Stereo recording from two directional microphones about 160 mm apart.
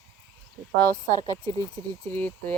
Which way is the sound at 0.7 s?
10° left (ahead or behind).